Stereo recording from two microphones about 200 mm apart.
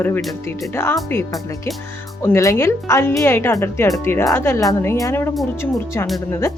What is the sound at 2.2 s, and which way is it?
Speech, 15° left (ahead or behind).